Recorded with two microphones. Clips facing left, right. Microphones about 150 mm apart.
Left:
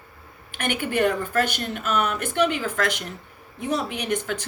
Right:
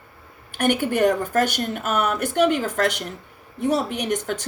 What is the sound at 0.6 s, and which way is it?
Speech, 40° right (ahead or behind).